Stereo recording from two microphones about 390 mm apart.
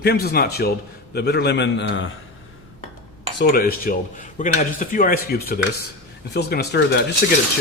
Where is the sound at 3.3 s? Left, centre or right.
Left.